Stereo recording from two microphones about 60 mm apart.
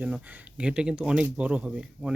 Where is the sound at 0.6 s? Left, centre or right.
Centre.